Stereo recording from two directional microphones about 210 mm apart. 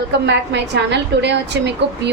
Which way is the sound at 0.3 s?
55° right (ahead or behind).